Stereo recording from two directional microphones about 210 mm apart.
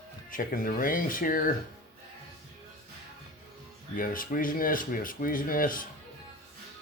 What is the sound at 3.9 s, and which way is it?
Speech, 40° left (ahead or behind).